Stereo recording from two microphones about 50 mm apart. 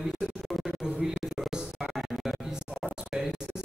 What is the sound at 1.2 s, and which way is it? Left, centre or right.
Music, centre.